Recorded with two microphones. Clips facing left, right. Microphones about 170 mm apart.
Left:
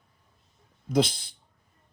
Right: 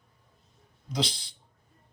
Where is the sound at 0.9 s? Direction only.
50° left (ahead or behind).